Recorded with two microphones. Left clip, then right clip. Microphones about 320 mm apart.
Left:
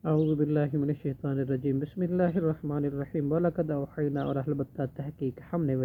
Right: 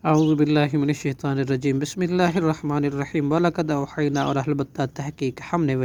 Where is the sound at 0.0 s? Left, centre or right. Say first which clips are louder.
Right 8 dB; centre.